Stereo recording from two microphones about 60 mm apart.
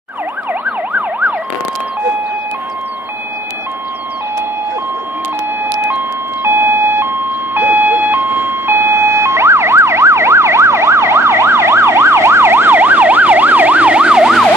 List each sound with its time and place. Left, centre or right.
0.5 s emergency vehicle: right
5.6 s emergency vehicle: right
6.4 s ambulance: right; by 14.3 s centre